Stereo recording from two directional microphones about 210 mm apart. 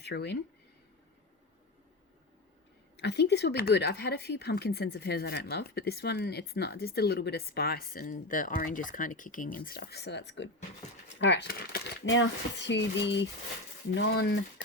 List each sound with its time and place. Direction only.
0.0 s speech: 55° left (ahead or behind)
3.0 s speech: 55° left (ahead or behind)